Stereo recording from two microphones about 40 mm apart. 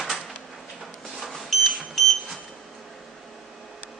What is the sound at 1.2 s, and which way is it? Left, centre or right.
Smoke detector, centre.